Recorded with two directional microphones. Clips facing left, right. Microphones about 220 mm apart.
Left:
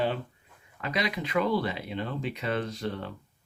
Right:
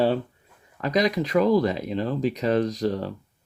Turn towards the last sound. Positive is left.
turn(degrees=-40)  # may be behind; listen again after turning